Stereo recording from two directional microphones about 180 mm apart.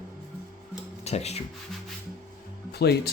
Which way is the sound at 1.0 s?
35° left (ahead or behind).